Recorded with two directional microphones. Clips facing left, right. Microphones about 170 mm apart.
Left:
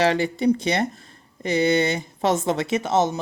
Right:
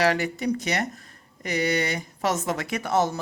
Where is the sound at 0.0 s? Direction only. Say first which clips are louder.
Left 4 dB; 25° left (ahead or behind).